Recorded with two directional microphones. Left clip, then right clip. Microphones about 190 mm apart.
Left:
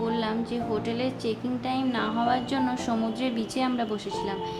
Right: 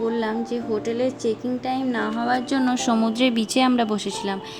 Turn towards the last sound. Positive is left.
turn(degrees=-45)  # may be behind; listen again after turning